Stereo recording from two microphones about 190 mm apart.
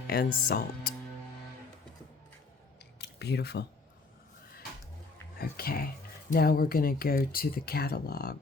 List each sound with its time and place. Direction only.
0.1 s speech: 50° left (ahead or behind)
3.0 s a sound: 60° left (ahead or behind)
5.4 s speech: 55° left (ahead or behind)